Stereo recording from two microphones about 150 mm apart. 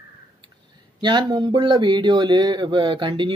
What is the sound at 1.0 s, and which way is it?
Speech, 30° right (ahead or behind).